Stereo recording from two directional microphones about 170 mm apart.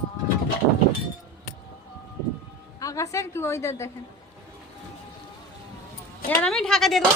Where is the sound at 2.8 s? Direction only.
20° left (ahead or behind).